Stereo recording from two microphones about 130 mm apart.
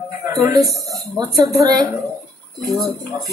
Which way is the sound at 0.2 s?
25° right (ahead or behind).